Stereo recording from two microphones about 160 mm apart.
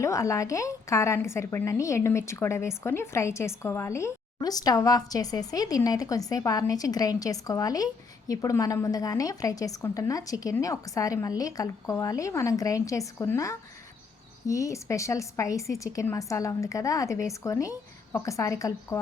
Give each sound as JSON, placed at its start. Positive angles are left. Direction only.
{"t": 0.0, "sound": "a woman's voice", "side_deg": 20}